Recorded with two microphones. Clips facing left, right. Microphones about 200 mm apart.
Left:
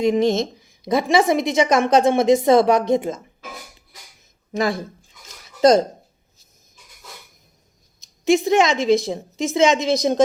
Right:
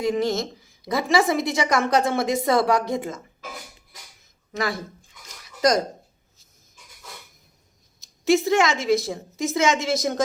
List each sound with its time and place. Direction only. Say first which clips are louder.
0.0 s a woman's voice: left 5 dB; 20° left (ahead or behind)
5.6 s a woman's voice: left 6 dB; 25° left (ahead or behind)
8.2 s a woman's voice: left 3 dB; 15° left (ahead or behind)